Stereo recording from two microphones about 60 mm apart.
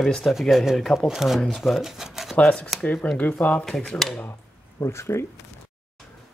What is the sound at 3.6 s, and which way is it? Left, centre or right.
Speech, centre.